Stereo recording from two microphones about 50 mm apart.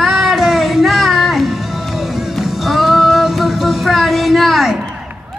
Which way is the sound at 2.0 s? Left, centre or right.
Centre.